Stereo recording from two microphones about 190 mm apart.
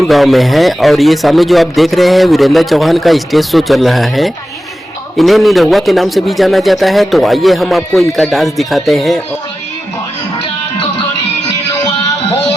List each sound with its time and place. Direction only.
0.0 s a man's voice: centre (ahead or behind)
11.4 s music: 20° left (ahead or behind)